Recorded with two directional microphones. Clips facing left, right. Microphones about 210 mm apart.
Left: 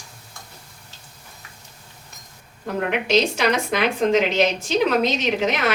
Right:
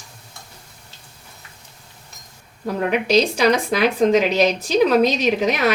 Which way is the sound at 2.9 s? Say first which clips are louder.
Right 3 dB; 35° right (ahead or behind).